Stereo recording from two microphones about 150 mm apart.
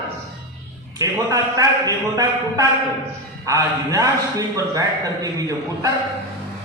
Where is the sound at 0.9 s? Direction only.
25° right (ahead or behind).